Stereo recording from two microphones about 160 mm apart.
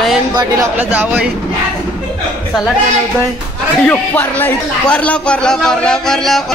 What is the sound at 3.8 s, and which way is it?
A man's voice, 10° left (ahead or behind).